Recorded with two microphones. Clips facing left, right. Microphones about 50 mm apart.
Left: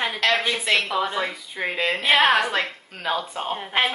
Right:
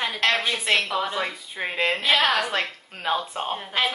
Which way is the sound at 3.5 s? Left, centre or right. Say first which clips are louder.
Left 1 dB; centre.